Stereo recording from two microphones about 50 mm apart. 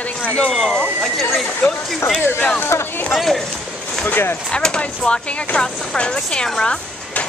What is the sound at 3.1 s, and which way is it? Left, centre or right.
Speech, centre.